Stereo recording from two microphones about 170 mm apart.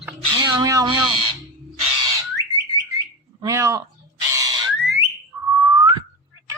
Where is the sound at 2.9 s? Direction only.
20° right (ahead or behind).